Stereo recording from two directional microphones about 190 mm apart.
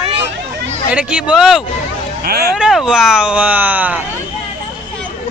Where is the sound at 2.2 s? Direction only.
55° right (ahead or behind).